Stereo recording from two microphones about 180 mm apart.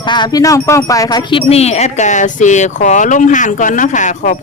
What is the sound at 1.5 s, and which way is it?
Speech, 35° left (ahead or behind).